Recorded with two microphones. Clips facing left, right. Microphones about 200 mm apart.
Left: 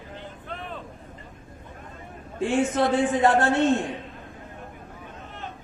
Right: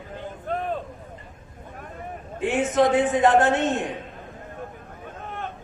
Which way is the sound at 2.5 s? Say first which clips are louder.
Right 2 dB; 20° right (ahead or behind).